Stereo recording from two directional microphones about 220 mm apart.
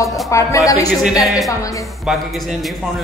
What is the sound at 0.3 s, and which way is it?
Speech, 15° left (ahead or behind).